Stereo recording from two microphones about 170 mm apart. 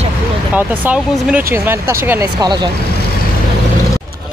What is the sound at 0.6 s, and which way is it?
Speech, 10° right (ahead or behind).